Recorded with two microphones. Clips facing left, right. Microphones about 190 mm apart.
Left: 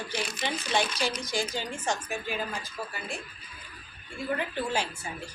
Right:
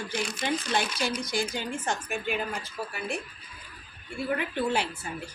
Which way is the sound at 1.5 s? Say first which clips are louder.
Even; 55° right (ahead or behind).